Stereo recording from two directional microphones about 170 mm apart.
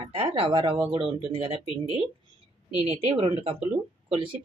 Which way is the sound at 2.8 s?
40° right (ahead or behind).